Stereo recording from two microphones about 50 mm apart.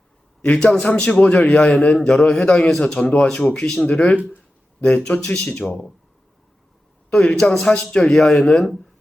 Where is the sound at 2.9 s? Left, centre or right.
Left; by 3.8 s centre.